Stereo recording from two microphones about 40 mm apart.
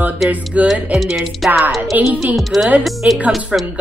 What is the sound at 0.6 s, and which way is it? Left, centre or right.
Speech, centre.